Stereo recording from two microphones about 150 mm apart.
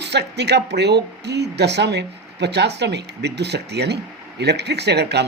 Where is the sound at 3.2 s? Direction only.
90° right.